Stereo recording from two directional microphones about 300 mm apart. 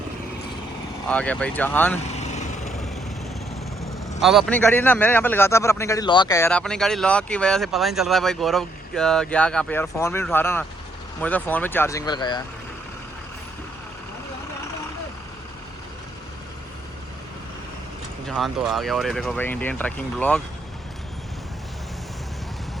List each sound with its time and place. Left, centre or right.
1.0 s speech: centre
2.0 s vehicle: left
3.8 s speech: centre
18.3 s speech: centre